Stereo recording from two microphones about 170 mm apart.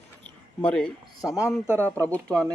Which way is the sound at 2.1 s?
10° left (ahead or behind).